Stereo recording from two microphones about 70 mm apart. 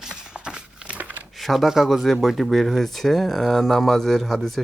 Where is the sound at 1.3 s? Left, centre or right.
Centre.